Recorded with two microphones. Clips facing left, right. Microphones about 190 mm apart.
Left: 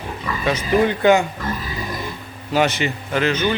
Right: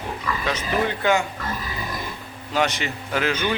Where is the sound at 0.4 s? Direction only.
15° left (ahead or behind).